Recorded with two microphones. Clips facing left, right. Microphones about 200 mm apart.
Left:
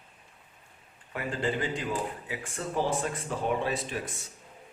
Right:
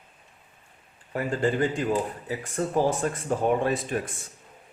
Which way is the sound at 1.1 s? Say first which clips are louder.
Right 5 dB; 45° right (ahead or behind).